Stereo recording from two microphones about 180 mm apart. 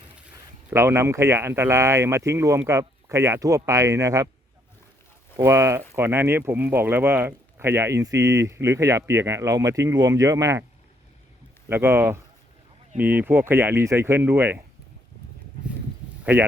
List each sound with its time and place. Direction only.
0.7 s speech: 15° right (ahead or behind)
5.4 s speech: 15° right (ahead or behind)
11.7 s speech: 15° right (ahead or behind)
16.2 s speech: 10° right (ahead or behind)